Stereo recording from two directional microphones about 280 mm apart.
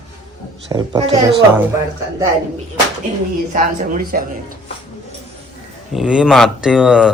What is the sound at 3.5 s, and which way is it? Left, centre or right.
Speech, right.